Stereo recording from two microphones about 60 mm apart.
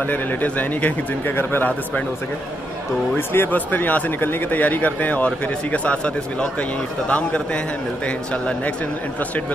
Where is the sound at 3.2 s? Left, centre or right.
Left.